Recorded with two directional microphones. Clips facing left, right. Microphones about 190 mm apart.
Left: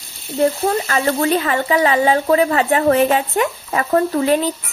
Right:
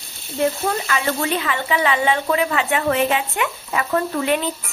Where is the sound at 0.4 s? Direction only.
40° left (ahead or behind).